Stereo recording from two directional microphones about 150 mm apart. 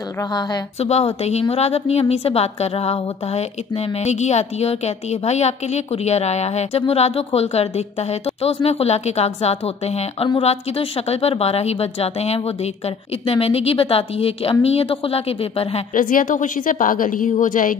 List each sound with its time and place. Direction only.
0.3 s speech: 25° left (ahead or behind)
0.7 s a woman's voice: 45° left (ahead or behind)
15.9 s a woman's voice: 65° left (ahead or behind)